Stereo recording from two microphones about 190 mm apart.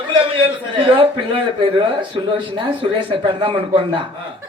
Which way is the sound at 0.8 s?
30° right (ahead or behind).